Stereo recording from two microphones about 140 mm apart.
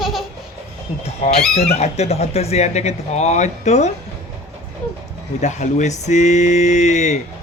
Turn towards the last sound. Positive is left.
turn(degrees=55)  # may be behind; listen again after turning